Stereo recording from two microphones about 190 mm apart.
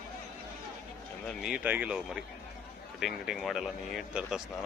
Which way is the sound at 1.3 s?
Centre (ahead or behind).